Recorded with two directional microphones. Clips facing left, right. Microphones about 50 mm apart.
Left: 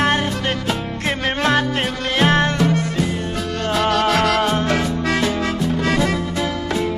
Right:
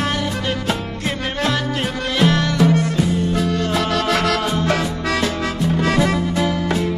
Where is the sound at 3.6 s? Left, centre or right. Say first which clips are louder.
Left 2 dB; left.